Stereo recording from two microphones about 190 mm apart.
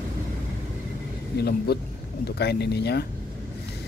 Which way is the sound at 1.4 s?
55° left (ahead or behind).